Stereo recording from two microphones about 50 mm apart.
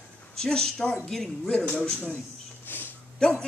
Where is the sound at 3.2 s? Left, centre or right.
Centre.